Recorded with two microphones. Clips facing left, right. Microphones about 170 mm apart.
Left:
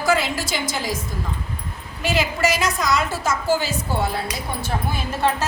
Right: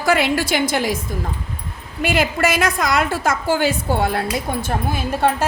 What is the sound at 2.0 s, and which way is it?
A woman's voice, 55° right (ahead or behind).